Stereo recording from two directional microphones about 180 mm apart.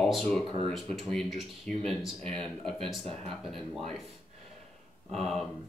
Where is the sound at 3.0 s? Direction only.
35° right (ahead or behind).